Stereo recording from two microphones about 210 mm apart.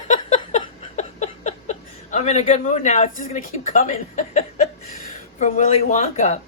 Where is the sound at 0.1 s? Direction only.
35° left (ahead or behind).